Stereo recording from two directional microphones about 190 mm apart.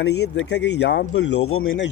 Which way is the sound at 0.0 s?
65° left (ahead or behind).